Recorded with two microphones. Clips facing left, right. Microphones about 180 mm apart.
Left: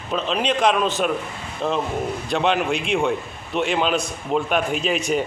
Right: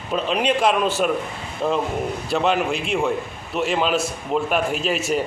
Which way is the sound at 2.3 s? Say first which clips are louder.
Even; 5° right (ahead or behind).